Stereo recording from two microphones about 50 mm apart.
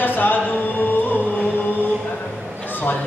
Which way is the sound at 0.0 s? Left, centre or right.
Left.